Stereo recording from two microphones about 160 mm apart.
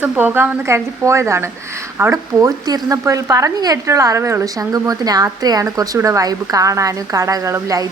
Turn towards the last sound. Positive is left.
turn(degrees=-20)  # may be behind; listen again after turning